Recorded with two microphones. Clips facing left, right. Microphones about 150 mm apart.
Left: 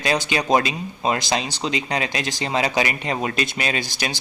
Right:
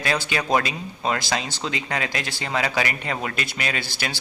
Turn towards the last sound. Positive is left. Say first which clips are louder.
# left 3 dB
turn(degrees=15)  # may be behind; listen again after turning